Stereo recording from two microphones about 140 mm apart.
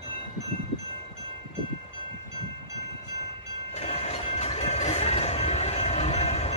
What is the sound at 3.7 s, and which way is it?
Music, 50° left (ahead or behind).